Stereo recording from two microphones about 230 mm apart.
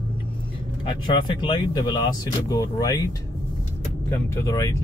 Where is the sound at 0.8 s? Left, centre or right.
Centre.